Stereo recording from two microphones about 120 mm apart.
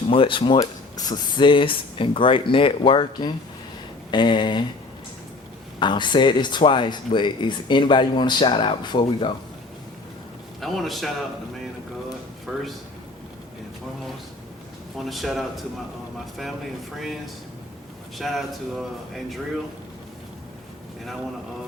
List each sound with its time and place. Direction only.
0.1 s speech: 45° left (ahead or behind)
5.8 s speech: 40° left (ahead or behind)
10.6 s speech: centre (ahead or behind)
12.5 s speech: centre (ahead or behind)
15.0 s speech: centre (ahead or behind)
18.2 s speech: centre (ahead or behind)